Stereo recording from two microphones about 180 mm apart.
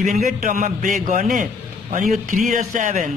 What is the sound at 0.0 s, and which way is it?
Speech, 45° right (ahead or behind).